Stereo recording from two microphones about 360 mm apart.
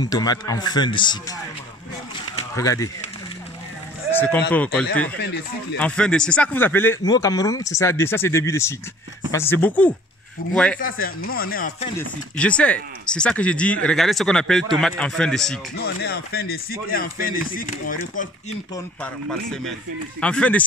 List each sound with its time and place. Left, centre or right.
0.0 s speech: centre
2.3 s a sound: centre
5.2 s speech: left
5.8 s speech: centre
10.8 s speech: left
12.0 s speech: centre
15.8 s speech: left
18.9 s speech: centre